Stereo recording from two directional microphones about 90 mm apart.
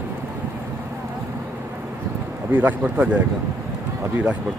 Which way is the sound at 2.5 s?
20° right (ahead or behind).